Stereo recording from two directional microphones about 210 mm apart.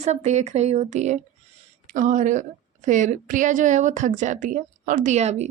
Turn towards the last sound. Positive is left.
turn(degrees=-30)  # may be behind; listen again after turning